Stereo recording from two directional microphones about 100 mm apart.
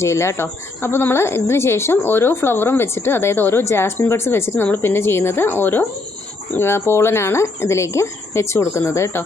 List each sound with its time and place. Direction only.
0.0 s speech: 30° left (ahead or behind)